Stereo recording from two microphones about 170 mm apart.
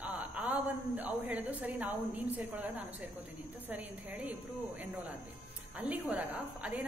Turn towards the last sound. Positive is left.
turn(degrees=-5)  # may be behind; listen again after turning